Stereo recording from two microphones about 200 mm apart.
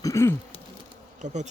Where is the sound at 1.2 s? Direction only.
35° right (ahead or behind).